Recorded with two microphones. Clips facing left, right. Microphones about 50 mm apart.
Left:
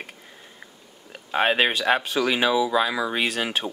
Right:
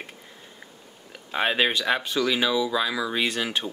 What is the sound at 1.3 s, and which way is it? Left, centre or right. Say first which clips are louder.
Speech: left 2 dB; centre.